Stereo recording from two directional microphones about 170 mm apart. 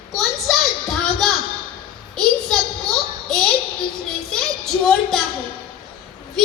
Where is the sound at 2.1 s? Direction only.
5° left (ahead or behind).